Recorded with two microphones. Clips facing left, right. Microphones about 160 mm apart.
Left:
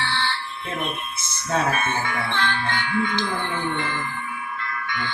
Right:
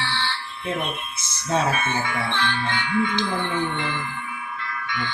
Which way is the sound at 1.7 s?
50° left (ahead or behind).